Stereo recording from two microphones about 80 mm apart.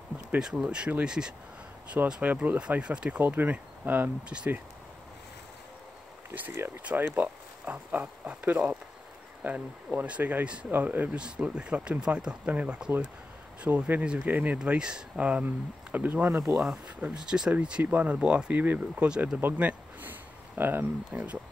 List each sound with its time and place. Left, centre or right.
0.4 s speech: centre
6.3 s speech: right
16.3 s speech: right
16.5 s speech: centre
19.4 s a sound: right